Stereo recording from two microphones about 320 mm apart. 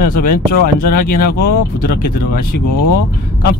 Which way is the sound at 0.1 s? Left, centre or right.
Left.